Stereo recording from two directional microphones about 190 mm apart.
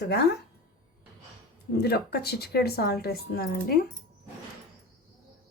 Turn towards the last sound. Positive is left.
turn(degrees=55)  # may be behind; listen again after turning